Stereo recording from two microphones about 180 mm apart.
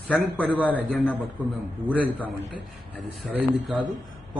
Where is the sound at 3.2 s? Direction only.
5° right (ahead or behind).